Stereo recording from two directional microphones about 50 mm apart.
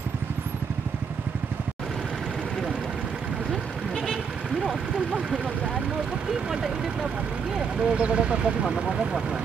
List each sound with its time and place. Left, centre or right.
3.9 s bleat: centre
6.5 s speech: centre
8.6 s speech: centre